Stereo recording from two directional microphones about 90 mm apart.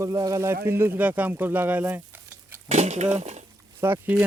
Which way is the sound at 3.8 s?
25° right (ahead or behind).